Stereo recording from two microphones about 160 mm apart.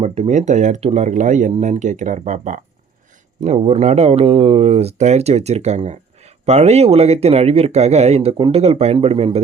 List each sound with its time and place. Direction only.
0.0 s speech: 40° right (ahead or behind)